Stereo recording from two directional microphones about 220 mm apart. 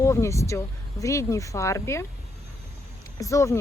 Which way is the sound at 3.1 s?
15° left (ahead or behind).